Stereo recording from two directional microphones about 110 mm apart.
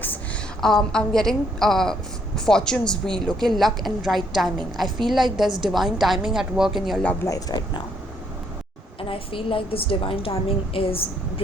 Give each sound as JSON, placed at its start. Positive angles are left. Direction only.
{"t": 0.6, "sound": "a woman's voice", "side_deg": 5}
{"t": 7.3, "sound": "speech", "side_deg": 35}
{"t": 9.0, "sound": "a woman's voice", "side_deg": 55}